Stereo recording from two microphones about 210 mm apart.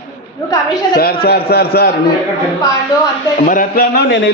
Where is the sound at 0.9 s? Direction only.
45° left (ahead or behind).